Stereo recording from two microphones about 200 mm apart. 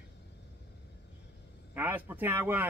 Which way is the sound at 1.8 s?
10° right (ahead or behind).